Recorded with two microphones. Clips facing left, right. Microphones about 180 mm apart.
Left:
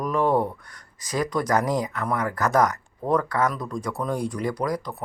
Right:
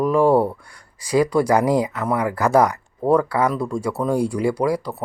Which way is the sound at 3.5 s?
30° right (ahead or behind).